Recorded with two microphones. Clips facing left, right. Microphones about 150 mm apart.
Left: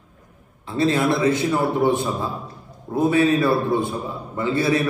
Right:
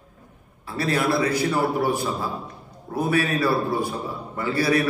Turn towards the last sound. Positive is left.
turn(degrees=25)  # may be behind; listen again after turning